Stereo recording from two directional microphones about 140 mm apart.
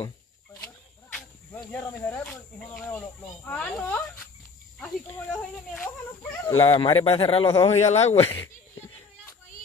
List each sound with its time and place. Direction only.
1.1 s cricket: 10° left (ahead or behind)
2.9 s speech: 10° left (ahead or behind)
6.8 s a man's voice: 40° left (ahead or behind)
7.6 s speech: 50° left (ahead or behind)
8.3 s a sound: 20° left (ahead or behind)